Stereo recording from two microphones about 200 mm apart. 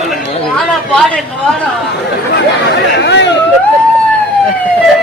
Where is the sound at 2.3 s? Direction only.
60° left (ahead or behind).